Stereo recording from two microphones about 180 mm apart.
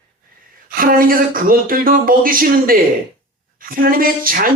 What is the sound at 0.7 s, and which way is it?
Speech, 55° right (ahead or behind).